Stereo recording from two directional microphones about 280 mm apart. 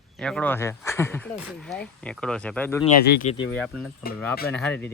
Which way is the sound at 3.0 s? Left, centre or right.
Left.